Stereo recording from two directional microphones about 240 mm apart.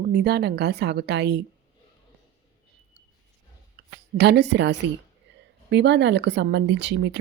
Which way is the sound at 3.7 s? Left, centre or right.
Right.